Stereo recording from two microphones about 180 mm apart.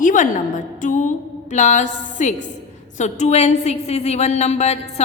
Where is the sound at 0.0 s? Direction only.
45° left (ahead or behind).